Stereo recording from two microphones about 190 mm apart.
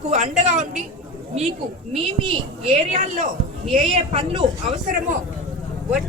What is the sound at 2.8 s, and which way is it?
A woman's voice, 35° right (ahead or behind).